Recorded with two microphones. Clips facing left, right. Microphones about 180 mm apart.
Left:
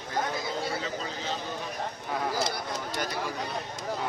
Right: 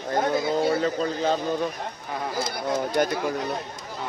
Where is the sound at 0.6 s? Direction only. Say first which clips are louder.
Right 10 dB; 50° right (ahead or behind).